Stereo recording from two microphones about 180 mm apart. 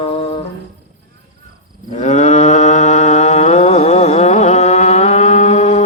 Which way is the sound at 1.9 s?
40° left (ahead or behind).